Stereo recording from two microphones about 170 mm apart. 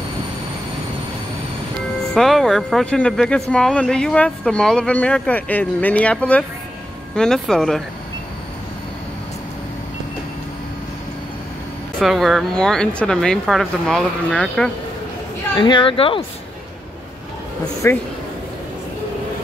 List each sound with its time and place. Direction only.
2.1 s speech: centre (ahead or behind)
12.0 s speech: centre (ahead or behind)
15.5 s speech: 25° left (ahead or behind)
17.8 s speech: 15° left (ahead or behind)